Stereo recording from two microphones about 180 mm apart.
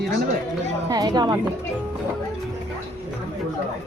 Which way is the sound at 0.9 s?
20° right (ahead or behind).